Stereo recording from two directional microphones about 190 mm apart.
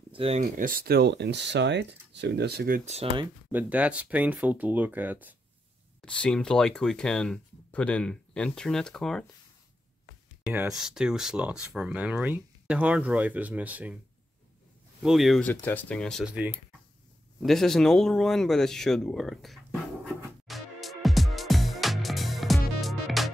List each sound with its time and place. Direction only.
0.1 s a sound: 30° right (ahead or behind)
0.4 s speech: 45° right (ahead or behind)
2.8 s speech: 35° right (ahead or behind)
3.5 s speech: 5° right (ahead or behind)
5.9 s speech: 5° left (ahead or behind)
10.4 s speech: 5° right (ahead or behind)
15.0 s speech: centre (ahead or behind)
20.4 s music: centre (ahead or behind)